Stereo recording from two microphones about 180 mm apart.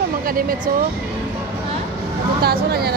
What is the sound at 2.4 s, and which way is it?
Speech, 60° right (ahead or behind).